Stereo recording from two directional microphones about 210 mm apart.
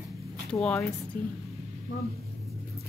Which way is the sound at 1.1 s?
45° left (ahead or behind).